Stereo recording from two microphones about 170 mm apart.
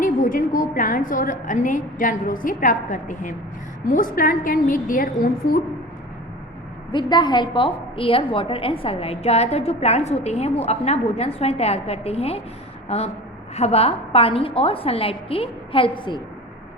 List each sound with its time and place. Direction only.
0.0 s a woman's voice: 50° left (ahead or behind)
6.9 s a woman's voice: 25° left (ahead or behind)